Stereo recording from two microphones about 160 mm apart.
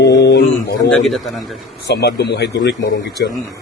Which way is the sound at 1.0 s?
Centre (ahead or behind).